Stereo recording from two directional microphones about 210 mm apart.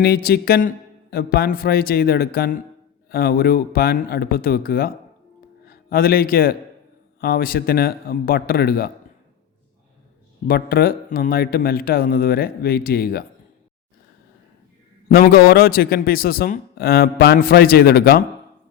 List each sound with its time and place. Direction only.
0.0 s a man's voice: 50° left (ahead or behind)
10.4 s a man's voice: 45° left (ahead or behind)
15.1 s a man's voice: 45° left (ahead or behind)